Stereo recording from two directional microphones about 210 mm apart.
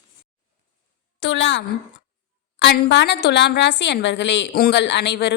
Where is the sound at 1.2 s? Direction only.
60° left (ahead or behind).